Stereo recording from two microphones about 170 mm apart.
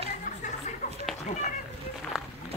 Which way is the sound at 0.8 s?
40° left (ahead or behind).